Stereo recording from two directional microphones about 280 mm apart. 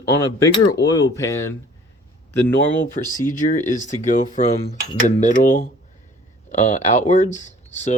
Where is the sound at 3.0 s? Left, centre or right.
Centre.